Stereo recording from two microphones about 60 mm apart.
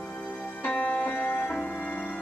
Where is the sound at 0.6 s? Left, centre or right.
Left.